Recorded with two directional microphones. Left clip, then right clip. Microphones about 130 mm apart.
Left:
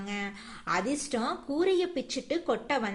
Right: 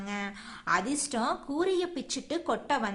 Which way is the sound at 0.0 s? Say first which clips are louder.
Even; 15° left (ahead or behind).